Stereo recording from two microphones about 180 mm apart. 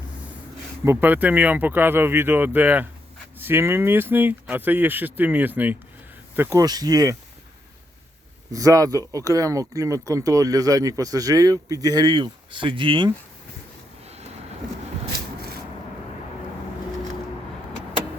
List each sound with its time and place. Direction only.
0.9 s speech: 10° right (ahead or behind)
8.5 s speech: 20° right (ahead or behind)
14.0 s a sound: 35° right (ahead or behind)